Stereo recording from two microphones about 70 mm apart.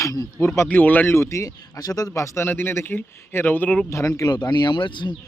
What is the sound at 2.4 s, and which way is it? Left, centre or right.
Speech, left.